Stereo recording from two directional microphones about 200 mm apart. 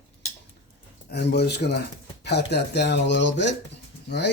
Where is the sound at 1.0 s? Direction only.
55° left (ahead or behind).